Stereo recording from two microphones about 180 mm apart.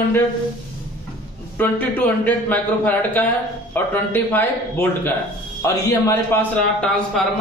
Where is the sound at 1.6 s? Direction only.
10° left (ahead or behind).